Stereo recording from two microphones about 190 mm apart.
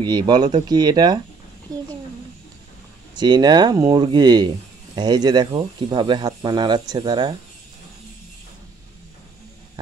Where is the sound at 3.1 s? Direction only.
20° right (ahead or behind).